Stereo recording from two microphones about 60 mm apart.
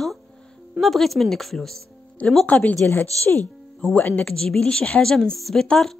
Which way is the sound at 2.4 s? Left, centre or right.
Left.